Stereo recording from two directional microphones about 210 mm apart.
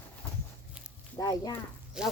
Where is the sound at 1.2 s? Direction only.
15° left (ahead or behind).